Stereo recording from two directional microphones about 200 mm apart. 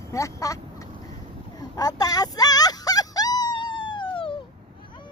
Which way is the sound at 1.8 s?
20° left (ahead or behind).